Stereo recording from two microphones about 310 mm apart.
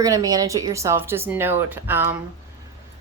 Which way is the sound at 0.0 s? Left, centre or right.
Centre.